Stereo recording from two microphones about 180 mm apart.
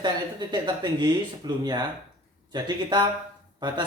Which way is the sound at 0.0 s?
25° right (ahead or behind).